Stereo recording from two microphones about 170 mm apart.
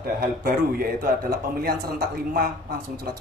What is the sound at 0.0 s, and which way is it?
A man's voice, 60° right (ahead or behind).